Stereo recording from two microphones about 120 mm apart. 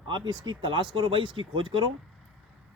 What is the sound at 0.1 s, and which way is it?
Speech, 40° right (ahead or behind).